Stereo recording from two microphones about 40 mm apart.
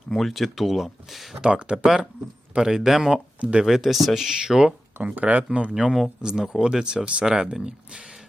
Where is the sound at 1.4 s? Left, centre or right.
Right.